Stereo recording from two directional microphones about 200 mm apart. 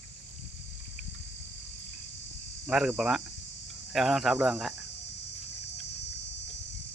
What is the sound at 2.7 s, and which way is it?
Speech, centre (ahead or behind).